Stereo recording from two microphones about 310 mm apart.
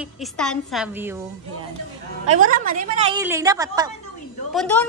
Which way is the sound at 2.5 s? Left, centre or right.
Right.